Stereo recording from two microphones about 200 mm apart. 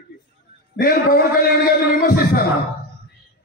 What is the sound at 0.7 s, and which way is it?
A man's voice, 45° left (ahead or behind).